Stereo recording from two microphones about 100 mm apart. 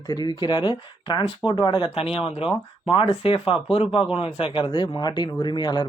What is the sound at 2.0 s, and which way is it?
Speech, 70° left (ahead or behind).